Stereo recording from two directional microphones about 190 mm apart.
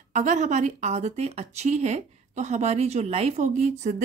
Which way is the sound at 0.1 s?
40° right (ahead or behind).